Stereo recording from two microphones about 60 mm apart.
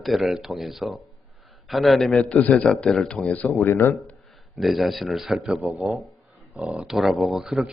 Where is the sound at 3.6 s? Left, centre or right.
Left.